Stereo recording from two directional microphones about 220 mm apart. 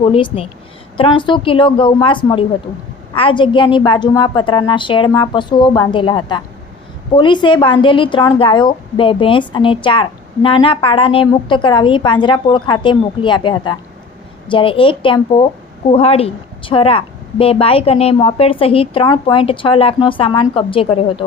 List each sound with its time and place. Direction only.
0.0 s a woman's voice: 25° left (ahead or behind)